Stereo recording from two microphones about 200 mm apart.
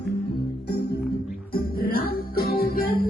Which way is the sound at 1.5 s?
50° left (ahead or behind).